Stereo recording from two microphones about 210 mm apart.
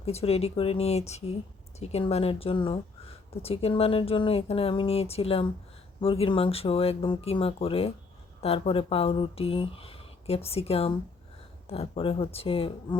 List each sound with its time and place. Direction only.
0.0 s speech: 30° left (ahead or behind)